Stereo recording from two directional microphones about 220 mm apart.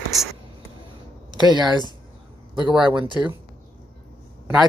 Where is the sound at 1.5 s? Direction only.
20° right (ahead or behind).